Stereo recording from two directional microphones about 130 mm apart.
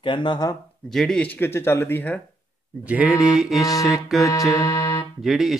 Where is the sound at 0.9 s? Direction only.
5° left (ahead or behind).